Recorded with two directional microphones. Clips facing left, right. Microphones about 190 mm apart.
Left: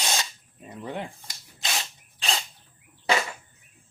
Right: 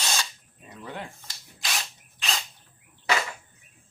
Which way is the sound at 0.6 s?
20° left (ahead or behind).